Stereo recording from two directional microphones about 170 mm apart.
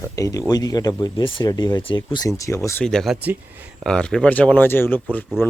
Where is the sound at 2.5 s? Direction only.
10° left (ahead or behind).